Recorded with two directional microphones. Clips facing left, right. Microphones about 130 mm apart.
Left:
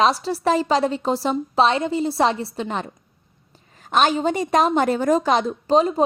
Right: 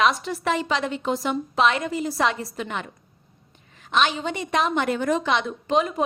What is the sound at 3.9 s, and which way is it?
A woman's voice, 45° left (ahead or behind).